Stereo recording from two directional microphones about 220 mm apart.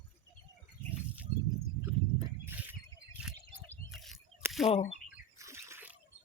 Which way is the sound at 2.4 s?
10° right (ahead or behind).